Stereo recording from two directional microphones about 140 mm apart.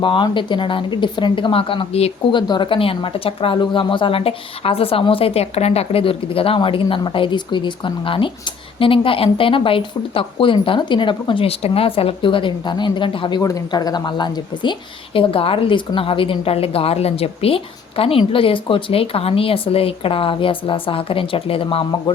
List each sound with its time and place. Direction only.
0.0 s a woman's voice: 35° left (ahead or behind)
2.5 s a woman's voice: 35° left (ahead or behind)